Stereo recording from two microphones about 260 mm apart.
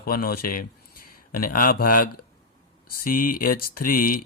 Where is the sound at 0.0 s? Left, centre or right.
Left.